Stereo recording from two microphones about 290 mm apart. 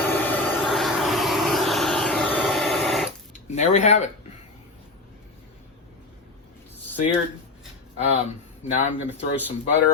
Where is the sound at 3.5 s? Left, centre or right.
Left.